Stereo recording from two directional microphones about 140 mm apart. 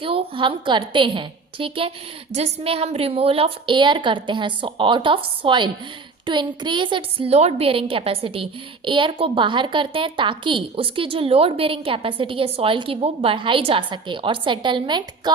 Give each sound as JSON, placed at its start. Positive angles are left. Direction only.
{"t": 0.0, "sound": "a woman's voice", "side_deg": -40}